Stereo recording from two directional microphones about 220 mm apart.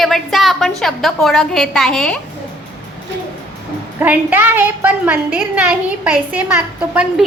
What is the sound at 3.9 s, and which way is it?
A woman's voice, 10° right (ahead or behind).